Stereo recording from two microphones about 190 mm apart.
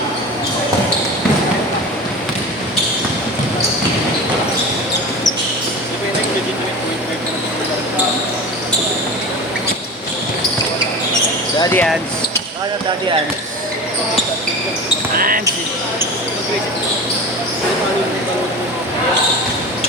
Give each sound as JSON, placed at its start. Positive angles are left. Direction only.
{"t": 11.7, "sound": "basketball bounce", "side_deg": 10}
{"t": 15.1, "sound": "basketball bounce", "side_deg": -50}